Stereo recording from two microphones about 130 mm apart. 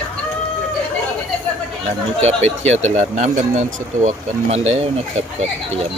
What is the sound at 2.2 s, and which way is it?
Speech, 60° right (ahead or behind).